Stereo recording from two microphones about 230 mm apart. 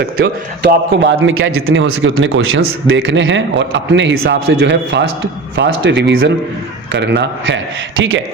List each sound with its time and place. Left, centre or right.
0.0 s a man's voice: right